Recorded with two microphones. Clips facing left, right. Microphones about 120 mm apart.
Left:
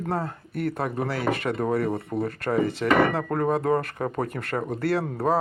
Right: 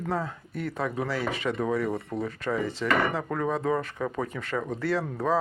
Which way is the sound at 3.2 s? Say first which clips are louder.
Left 4 dB; 45° left (ahead or behind).